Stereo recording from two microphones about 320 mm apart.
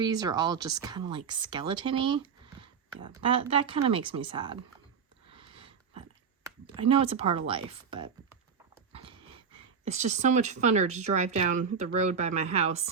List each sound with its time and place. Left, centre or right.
0.0 s speech: centre
5.3 s a sound: centre
6.4 s speech: centre